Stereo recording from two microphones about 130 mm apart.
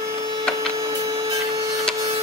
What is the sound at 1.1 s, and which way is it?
Wood, 35° right (ahead or behind).